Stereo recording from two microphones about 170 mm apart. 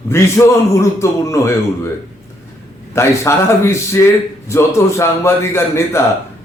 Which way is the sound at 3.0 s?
15° left (ahead or behind).